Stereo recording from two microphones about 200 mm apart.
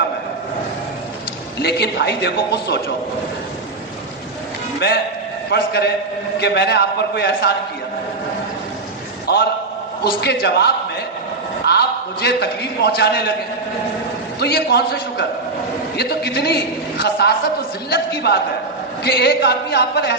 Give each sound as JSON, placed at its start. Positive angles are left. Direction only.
{"t": 1.6, "sound": "a man's voice", "side_deg": 55}
{"t": 5.5, "sound": "a man's voice", "side_deg": 55}
{"t": 9.3, "sound": "a man's voice", "side_deg": 55}
{"t": 11.7, "sound": "a sound", "side_deg": 55}
{"t": 12.2, "sound": "a man's voice", "side_deg": 55}
{"t": 14.3, "sound": "a man's voice", "side_deg": 55}